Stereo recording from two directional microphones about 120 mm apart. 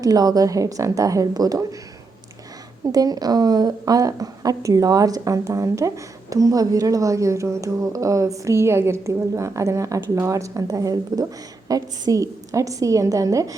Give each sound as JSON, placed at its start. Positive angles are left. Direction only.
{"t": 0.0, "sound": "speech", "side_deg": -30}
{"t": 2.8, "sound": "a woman's voice", "side_deg": -30}